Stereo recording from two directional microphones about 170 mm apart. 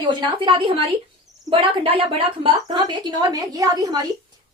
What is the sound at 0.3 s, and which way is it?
A woman's voice, 30° right (ahead or behind).